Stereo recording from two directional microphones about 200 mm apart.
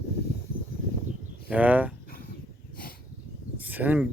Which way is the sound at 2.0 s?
50° left (ahead or behind).